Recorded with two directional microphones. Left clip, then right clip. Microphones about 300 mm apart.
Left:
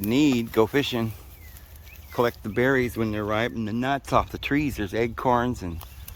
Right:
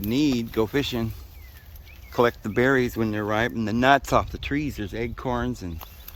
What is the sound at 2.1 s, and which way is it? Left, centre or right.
Speech, centre.